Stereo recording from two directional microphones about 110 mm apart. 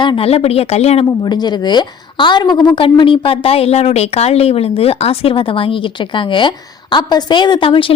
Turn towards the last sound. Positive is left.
turn(degrees=55)  # may be behind; listen again after turning